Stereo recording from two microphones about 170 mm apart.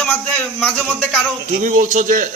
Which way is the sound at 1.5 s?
50° right (ahead or behind).